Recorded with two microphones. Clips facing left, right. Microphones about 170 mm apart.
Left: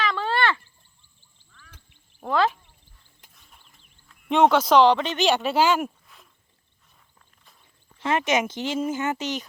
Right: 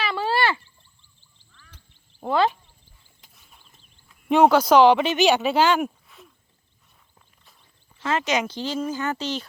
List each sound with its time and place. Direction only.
0.0 s a sound: 10° right (ahead or behind)
2.3 s speech: centre (ahead or behind)
3.3 s mechanisms: 5° right (ahead or behind)
4.1 s speech: centre (ahead or behind)
7.9 s speech: 20° left (ahead or behind)